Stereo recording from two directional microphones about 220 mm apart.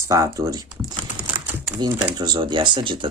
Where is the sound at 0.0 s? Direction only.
15° right (ahead or behind).